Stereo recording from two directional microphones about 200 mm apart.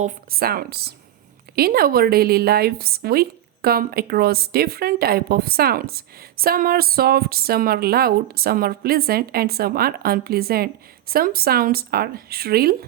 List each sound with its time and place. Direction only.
0.0 s a woman's voice: 50° right (ahead or behind)